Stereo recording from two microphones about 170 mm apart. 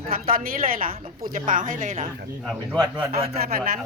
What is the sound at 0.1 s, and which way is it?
A woman's voice, 55° right (ahead or behind).